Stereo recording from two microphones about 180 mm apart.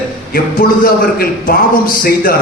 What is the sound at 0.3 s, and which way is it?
A man's voice, 50° left (ahead or behind).